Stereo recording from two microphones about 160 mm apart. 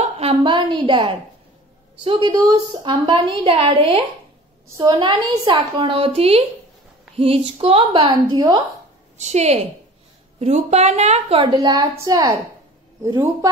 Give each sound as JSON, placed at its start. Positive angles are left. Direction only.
{"t": 0.0, "sound": "a sound", "side_deg": -35}
{"t": 2.0, "sound": "a woman's voice", "side_deg": -30}
{"t": 9.2, "sound": "a woman's voice", "side_deg": -45}
{"t": 11.5, "sound": "a woman's voice", "side_deg": -25}